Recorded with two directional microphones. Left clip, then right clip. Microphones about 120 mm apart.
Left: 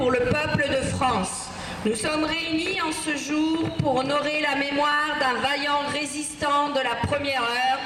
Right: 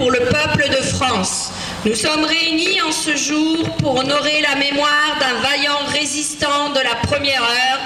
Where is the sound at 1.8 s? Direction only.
45° right (ahead or behind).